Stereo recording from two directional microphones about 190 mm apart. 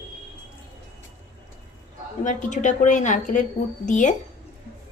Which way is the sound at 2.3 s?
40° left (ahead or behind).